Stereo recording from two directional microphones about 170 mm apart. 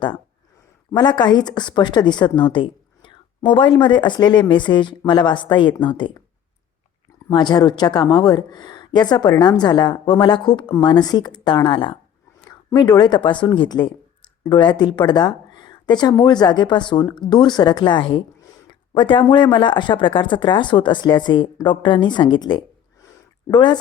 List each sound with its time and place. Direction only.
0.9 s a woman's voice: 25° left (ahead or behind)
7.3 s a woman's voice: 25° left (ahead or behind)